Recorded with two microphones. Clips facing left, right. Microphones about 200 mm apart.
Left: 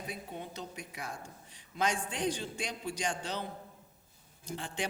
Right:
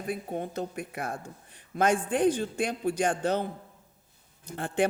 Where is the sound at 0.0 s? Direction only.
50° right (ahead or behind).